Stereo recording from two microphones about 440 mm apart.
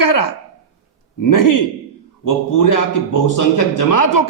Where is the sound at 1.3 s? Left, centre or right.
Left.